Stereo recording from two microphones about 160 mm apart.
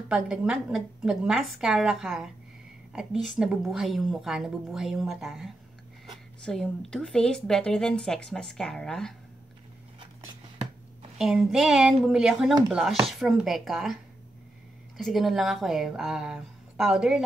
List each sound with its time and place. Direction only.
0.1 s speech: 5° right (ahead or behind)
2.9 s a sound: 5° right (ahead or behind)
3.3 s speech: 5° right (ahead or behind)
11.1 s speech: centre (ahead or behind)
15.0 s speech: centre (ahead or behind)